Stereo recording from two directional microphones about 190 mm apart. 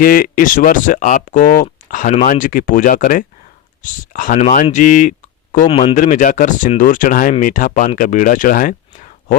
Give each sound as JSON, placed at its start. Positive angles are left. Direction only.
{"t": 0.0, "sound": "speech", "side_deg": 50}